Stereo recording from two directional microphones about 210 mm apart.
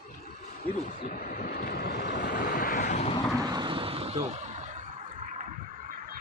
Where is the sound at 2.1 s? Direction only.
40° left (ahead or behind).